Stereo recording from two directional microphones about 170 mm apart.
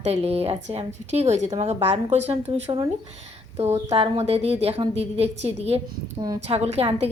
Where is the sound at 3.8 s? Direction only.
35° right (ahead or behind).